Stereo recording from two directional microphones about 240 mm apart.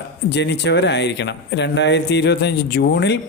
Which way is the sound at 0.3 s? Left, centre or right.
Left.